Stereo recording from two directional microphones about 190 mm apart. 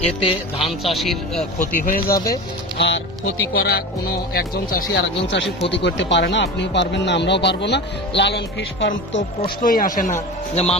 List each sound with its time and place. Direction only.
0.2 s speech: 30° left (ahead or behind)
0.9 s speech: centre (ahead or behind)
1.8 s speech: 45° left (ahead or behind)
2.1 s speech: 20° left (ahead or behind)
2.7 s speech: 65° left (ahead or behind)
9.4 s speech: 45° left (ahead or behind)
10.5 s speech: 35° left (ahead or behind)